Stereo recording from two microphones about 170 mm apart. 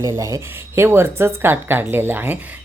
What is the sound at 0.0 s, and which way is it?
Speech, 20° right (ahead or behind).